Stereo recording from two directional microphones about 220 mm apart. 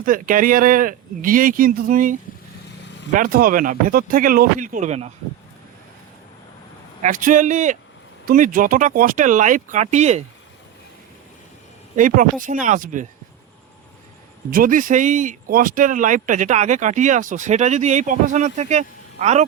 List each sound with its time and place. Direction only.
0.0 s speech: 40° right (ahead or behind)
7.0 s speech: 35° right (ahead or behind)
11.9 s speech: 40° right (ahead or behind)
14.5 s speech: 40° right (ahead or behind)